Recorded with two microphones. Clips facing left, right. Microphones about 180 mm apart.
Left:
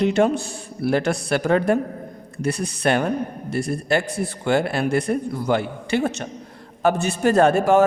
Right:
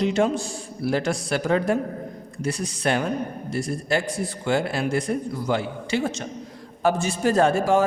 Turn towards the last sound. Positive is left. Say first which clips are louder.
# left 3 dB
turn(degrees=65)  # may be behind; listen again after turning